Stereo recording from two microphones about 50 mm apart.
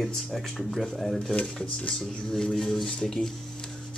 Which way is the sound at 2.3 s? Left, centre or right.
Centre.